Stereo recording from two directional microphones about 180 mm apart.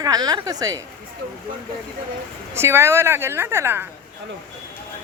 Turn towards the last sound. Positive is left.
turn(degrees=-15)  # may be behind; listen again after turning